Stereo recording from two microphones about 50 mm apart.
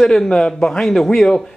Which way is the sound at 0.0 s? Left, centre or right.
Centre.